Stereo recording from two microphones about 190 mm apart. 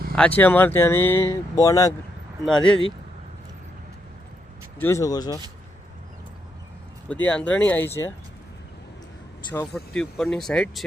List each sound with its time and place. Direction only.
0.2 s speech: 10° left (ahead or behind)
2.4 s speech: 5° left (ahead or behind)
4.8 s speech: 15° left (ahead or behind)
7.1 s speech: 10° left (ahead or behind)
9.7 s speech: 5° left (ahead or behind)